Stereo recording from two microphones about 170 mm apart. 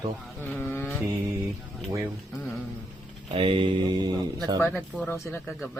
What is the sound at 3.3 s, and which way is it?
Speech, 30° right (ahead or behind).